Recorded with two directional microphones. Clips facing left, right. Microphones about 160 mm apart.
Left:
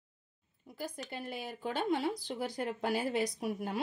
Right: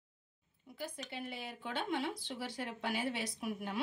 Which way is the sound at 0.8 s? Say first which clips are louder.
Left 3 dB; 40° left (ahead or behind).